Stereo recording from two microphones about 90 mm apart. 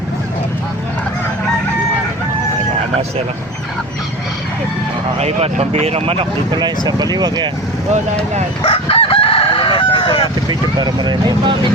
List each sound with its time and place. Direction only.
6.5 s speech: 55° right (ahead or behind)
8.6 s chicken: 90° left
10.5 s speech: 50° right (ahead or behind)